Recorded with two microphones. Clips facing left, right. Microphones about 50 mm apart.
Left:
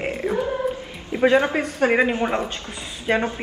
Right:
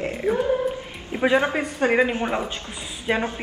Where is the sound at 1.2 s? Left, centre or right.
Centre.